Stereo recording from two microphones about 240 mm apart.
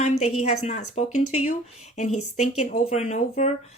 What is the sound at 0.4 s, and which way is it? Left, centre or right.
Speech, left.